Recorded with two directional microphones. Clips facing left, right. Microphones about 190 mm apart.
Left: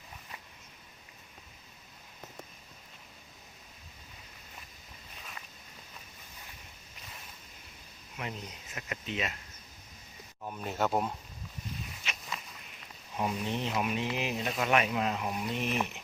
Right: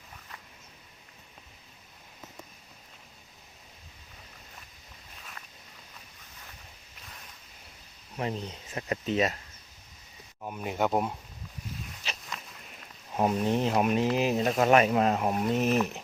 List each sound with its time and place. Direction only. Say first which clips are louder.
5.4 s walk: even; 5° left (ahead or behind)
8.1 s speech: right 7 dB; 35° right (ahead or behind)
10.4 s speech: right 3 dB; 10° right (ahead or behind)
12.1 s walk: right 4 dB; 35° right (ahead or behind)
13.1 s speech: right 7 dB; 45° right (ahead or behind)